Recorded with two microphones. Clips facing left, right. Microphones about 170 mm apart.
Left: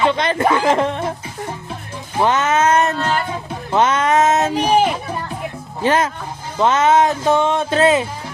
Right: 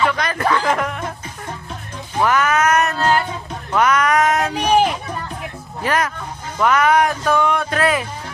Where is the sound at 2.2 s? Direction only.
25° left (ahead or behind).